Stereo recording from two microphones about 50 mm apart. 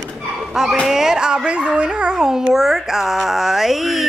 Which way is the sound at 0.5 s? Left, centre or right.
Centre.